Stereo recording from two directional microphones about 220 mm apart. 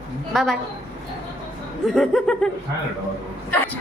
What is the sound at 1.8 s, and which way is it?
Speech, centre (ahead or behind).